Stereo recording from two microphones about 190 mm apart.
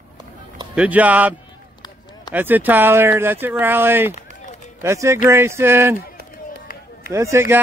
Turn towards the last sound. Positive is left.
turn(degrees=-15)  # may be behind; listen again after turning